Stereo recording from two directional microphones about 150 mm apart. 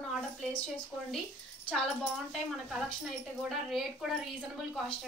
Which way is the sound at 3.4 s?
Centre (ahead or behind).